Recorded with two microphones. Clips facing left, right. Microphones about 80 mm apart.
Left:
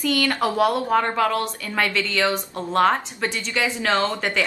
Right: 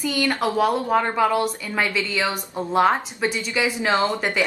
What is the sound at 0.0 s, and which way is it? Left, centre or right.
Speech, centre.